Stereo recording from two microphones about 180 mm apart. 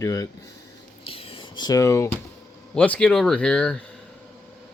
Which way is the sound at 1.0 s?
30° left (ahead or behind).